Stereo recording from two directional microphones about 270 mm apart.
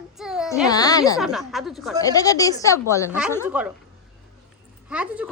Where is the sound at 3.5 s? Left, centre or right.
Centre.